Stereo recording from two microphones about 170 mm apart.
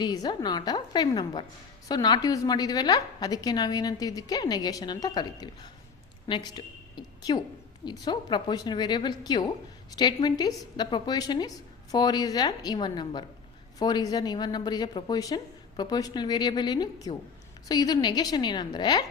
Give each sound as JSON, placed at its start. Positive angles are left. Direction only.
{"t": 0.0, "sound": "a woman's voice", "side_deg": 25}